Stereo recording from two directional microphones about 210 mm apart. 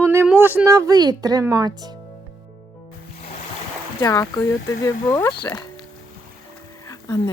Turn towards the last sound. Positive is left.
turn(degrees=15)  # may be behind; listen again after turning